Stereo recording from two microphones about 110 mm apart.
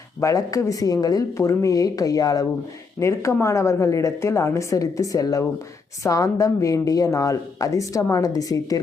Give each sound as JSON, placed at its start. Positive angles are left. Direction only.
{"t": 0.2, "sound": "a woman's voice", "side_deg": 30}